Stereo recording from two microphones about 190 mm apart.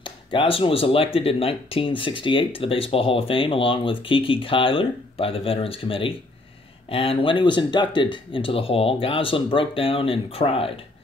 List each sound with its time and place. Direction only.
0.0 s speech: 25° left (ahead or behind)